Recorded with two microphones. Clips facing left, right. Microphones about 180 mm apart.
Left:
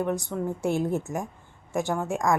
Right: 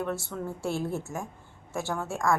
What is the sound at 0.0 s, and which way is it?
Speech, 15° left (ahead or behind).